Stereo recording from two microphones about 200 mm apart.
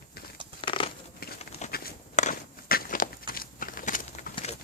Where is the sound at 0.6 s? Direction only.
25° left (ahead or behind).